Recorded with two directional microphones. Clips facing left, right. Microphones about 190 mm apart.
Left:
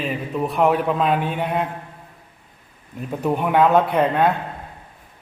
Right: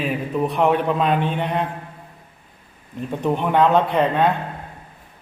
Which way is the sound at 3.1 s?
5° left (ahead or behind).